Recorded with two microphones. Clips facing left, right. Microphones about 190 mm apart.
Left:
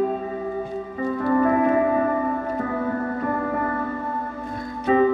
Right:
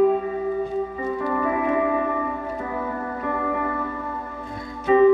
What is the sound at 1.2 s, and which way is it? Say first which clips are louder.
Music: left 6 dB; 45° left (ahead or behind).